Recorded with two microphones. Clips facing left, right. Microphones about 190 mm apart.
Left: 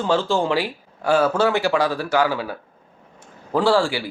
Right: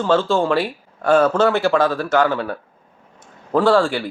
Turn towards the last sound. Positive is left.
turn(degrees=10)  # may be behind; listen again after turning